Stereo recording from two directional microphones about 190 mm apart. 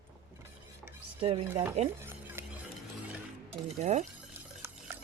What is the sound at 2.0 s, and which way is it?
Music, 10° right (ahead or behind).